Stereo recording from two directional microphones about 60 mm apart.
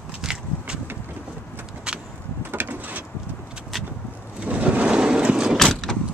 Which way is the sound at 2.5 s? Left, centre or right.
Right.